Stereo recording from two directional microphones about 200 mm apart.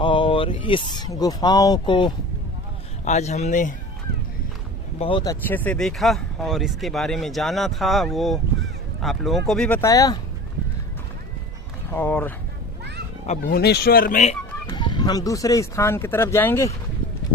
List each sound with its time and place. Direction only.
0.0 s speech: 25° left (ahead or behind)
3.0 s speech: 35° left (ahead or behind)
4.9 s speech: 25° left (ahead or behind)
11.9 s speech: 10° left (ahead or behind)
13.2 s speech: 35° left (ahead or behind)
13.5 s speech: 55° left (ahead or behind); by 14.3 s 40° left (ahead or behind)
14.7 s speech: 20° left (ahead or behind)